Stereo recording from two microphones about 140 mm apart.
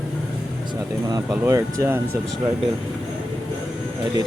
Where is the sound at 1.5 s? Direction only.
20° right (ahead or behind).